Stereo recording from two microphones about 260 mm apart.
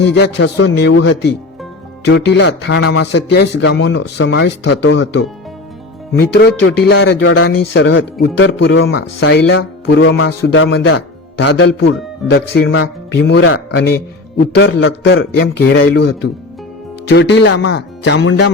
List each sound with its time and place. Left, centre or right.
0.0 s speech: left
6.3 s speech: left